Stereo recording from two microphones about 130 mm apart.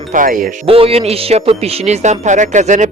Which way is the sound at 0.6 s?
45° right (ahead or behind).